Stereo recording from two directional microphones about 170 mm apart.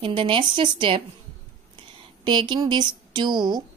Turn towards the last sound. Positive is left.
turn(degrees=-25)  # may be behind; listen again after turning